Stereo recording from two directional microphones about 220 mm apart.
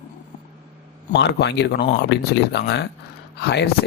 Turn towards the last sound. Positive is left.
turn(degrees=50)  # may be behind; listen again after turning